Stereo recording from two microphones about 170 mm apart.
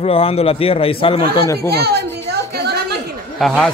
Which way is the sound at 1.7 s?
70° right (ahead or behind).